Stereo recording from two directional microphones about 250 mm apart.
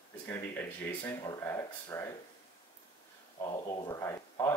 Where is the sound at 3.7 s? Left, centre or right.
Centre.